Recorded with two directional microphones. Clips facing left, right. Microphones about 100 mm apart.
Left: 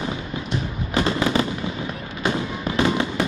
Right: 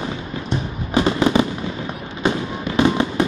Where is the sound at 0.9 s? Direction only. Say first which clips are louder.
Right 4 dB; 20° right (ahead or behind).